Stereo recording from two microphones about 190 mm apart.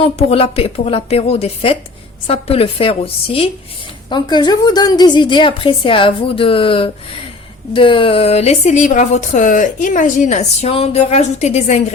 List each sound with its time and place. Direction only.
0.3 s a woman's voice: 30° left (ahead or behind)
4.1 s a woman's voice: 25° left (ahead or behind)